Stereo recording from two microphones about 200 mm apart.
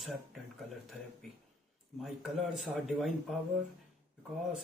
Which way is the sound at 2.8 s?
Centre (ahead or behind).